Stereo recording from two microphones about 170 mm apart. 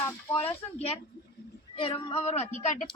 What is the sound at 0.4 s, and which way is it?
Speech, 35° left (ahead or behind).